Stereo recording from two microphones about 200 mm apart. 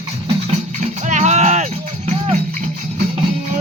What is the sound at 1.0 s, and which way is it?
Music, 35° right (ahead or behind).